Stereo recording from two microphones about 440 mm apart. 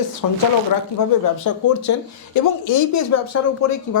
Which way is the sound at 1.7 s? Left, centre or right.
Left.